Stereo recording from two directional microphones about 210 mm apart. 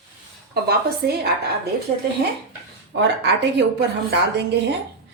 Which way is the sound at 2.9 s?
55° right (ahead or behind).